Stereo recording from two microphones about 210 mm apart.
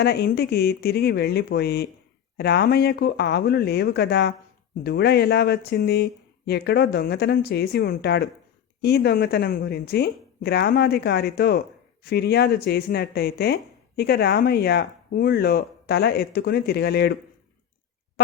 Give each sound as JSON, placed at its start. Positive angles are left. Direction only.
{"t": 0.0, "sound": "speech", "side_deg": 50}